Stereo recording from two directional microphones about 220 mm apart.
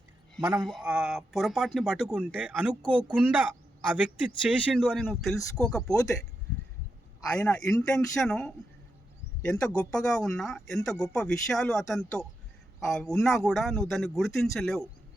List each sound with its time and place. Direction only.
0.4 s a man's voice: 20° right (ahead or behind)
0.7 s speech: centre (ahead or behind)
4.4 s speech: centre (ahead or behind)
7.3 s speech: 5° left (ahead or behind)